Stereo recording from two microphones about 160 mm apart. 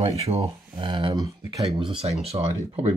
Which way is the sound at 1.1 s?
20° right (ahead or behind).